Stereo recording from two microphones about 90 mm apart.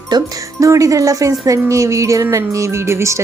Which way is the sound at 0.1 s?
40° right (ahead or behind).